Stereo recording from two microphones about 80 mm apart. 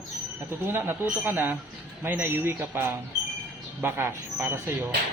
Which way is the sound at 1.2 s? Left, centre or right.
Right.